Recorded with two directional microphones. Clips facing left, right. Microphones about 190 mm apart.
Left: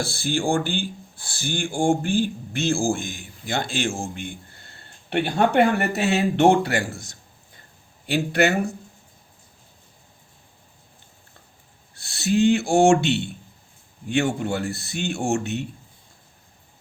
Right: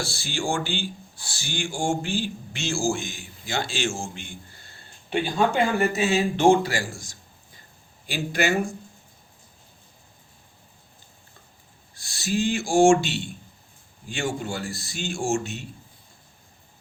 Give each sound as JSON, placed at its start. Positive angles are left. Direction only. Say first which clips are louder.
{"t": 0.0, "sound": "speech", "louder": "left 5 dB", "side_deg": 55}
{"t": 11.9, "sound": "speech", "louder": "left 5 dB", "side_deg": 60}